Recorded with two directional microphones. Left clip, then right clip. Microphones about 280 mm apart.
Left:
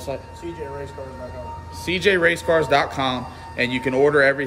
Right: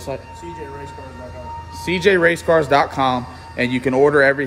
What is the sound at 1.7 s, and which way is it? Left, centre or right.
Speech, right.